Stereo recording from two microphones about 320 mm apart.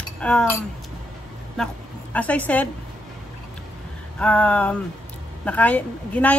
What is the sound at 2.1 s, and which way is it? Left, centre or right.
Speech, centre.